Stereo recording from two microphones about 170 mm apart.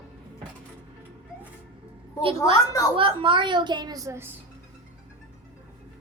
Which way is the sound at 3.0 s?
30° right (ahead or behind).